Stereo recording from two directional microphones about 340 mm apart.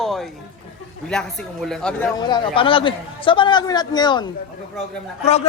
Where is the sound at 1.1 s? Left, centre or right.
Centre.